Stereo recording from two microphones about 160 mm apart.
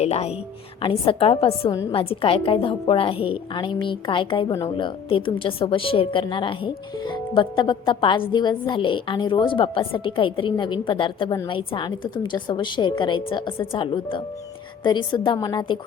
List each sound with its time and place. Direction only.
0.0 s a woman's voice: 40° left (ahead or behind)